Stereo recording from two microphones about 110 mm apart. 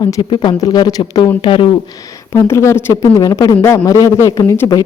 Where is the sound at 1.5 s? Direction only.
50° left (ahead or behind).